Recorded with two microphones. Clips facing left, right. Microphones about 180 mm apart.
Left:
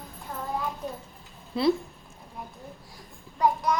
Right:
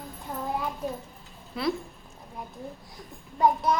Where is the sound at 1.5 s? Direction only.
25° left (ahead or behind).